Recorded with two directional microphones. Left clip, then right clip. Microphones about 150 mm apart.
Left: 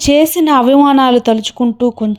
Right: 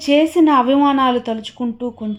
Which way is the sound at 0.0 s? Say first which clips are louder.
Left 3 dB; 45° left (ahead or behind).